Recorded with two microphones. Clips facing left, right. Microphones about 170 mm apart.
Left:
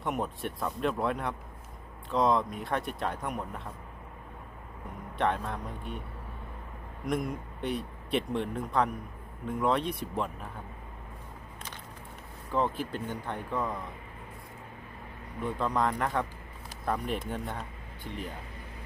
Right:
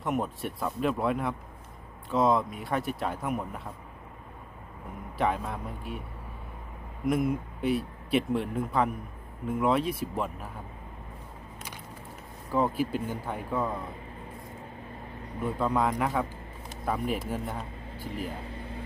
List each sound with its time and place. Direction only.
0.0 s speech: centre (ahead or behind)
5.1 s speech: 5° right (ahead or behind)
7.0 s speech: 5° right (ahead or behind)
12.5 s speech: 5° right (ahead or behind)
15.4 s speech: 5° right (ahead or behind)
18.5 s vehicle: 30° right (ahead or behind)